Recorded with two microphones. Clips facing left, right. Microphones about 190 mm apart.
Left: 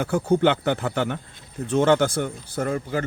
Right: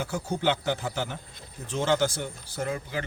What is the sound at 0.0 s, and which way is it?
Speech, 55° left (ahead or behind).